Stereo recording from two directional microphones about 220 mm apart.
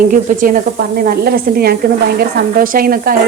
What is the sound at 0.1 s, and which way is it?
Speech, 35° right (ahead or behind).